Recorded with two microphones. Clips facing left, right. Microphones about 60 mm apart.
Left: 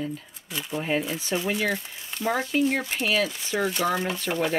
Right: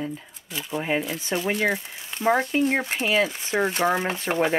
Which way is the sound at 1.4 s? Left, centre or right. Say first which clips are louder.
Right 4 dB; right.